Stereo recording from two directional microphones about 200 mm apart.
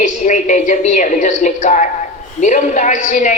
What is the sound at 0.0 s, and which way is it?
A woman's voice, 40° left (ahead or behind).